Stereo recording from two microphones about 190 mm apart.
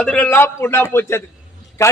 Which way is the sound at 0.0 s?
5° left (ahead or behind).